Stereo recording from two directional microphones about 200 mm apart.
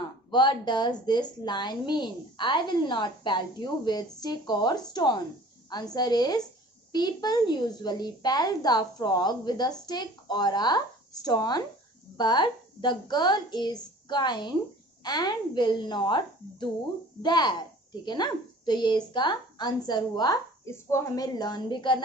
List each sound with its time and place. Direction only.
0.3 s a woman's voice: 20° left (ahead or behind)